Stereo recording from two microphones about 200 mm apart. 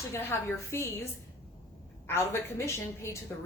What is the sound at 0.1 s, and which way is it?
Speech, 15° left (ahead or behind).